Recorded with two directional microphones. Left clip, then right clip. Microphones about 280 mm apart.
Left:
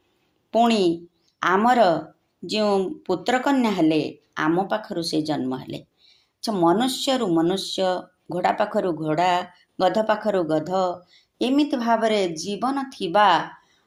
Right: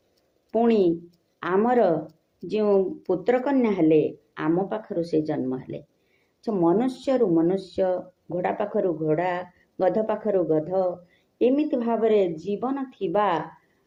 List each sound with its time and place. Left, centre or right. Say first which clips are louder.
0.5 s speech: left 2 dB; left